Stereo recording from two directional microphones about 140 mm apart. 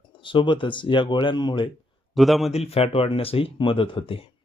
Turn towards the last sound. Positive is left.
turn(degrees=40)  # may be behind; listen again after turning